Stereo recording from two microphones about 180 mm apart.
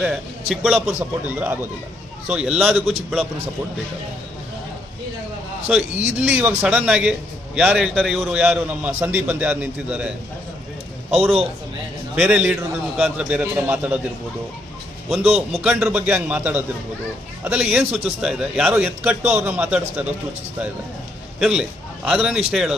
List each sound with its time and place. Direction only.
0.0 s a man's voice: centre (ahead or behind)
5.6 s a man's voice: 5° right (ahead or behind)
12.1 s a man's voice: 5° right (ahead or behind)
15.1 s a man's voice: 35° right (ahead or behind)
15.4 s a man's voice: centre (ahead or behind)
21.3 s a man's voice: 5° right (ahead or behind)